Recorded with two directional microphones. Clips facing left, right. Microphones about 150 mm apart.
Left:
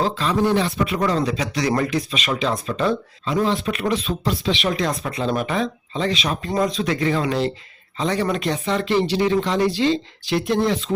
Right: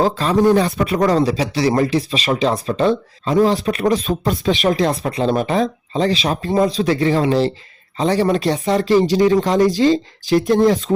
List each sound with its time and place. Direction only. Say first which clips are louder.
0.0 s speech: right 5 dB; 45° right (ahead or behind)